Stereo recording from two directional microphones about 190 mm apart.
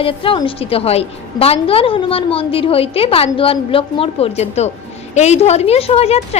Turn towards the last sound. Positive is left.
turn(degrees=35)  # may be behind; listen again after turning